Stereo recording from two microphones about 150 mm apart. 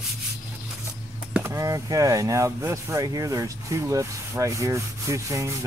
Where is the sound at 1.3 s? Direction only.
15° right (ahead or behind).